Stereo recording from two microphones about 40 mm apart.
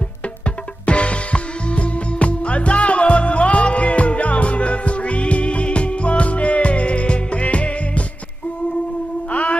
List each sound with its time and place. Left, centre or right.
0.8 s music: left
9.3 s music: left